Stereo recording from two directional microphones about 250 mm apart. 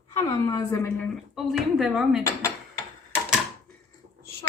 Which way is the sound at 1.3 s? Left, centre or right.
Centre.